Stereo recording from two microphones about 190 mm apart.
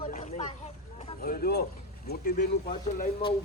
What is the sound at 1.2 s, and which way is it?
Speech, 50° left (ahead or behind).